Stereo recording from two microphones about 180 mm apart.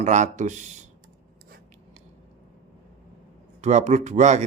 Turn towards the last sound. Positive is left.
turn(degrees=-40)  # may be behind; listen again after turning